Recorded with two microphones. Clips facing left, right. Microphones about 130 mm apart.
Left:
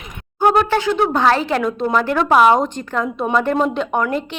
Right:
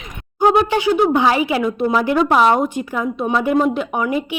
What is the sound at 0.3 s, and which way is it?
A woman's voice, 15° right (ahead or behind).